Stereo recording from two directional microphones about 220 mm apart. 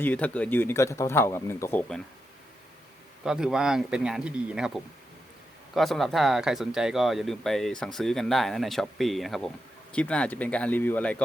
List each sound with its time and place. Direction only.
0.0 s speech: 5° left (ahead or behind)
3.2 s speech: 5° right (ahead or behind)